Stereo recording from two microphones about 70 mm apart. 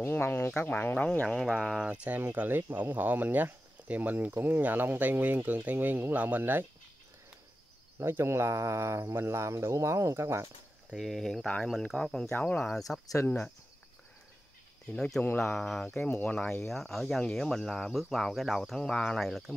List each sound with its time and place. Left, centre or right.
0.0 s speech: left
1.2 s speech: centre
2.0 s speech: right
8.0 s speech: right
11.0 s speech: centre
12.4 s speech: left
12.6 s speech: centre
15.0 s speech: centre
15.2 s speech: left
15.5 s speech: centre
16.1 s speech: left
16.6 s speech: centre